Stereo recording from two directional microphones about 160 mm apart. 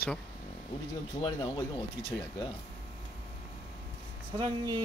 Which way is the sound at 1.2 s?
25° left (ahead or behind).